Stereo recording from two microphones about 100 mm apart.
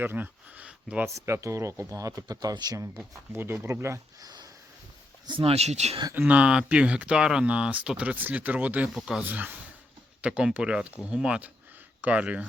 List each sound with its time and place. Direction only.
0.0 s speech: 20° right (ahead or behind)
1.0 s speech: 25° right (ahead or behind)
3.3 s speech: 25° right (ahead or behind)
5.2 s speech: 60° right (ahead or behind); by 6.0 s 90° right
6.1 s speech: 15° right (ahead or behind)
8.9 s speech: centre (ahead or behind)
9.2 s speech: 20° right (ahead or behind)